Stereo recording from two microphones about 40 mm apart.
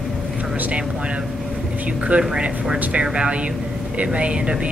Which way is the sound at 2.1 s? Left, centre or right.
Right.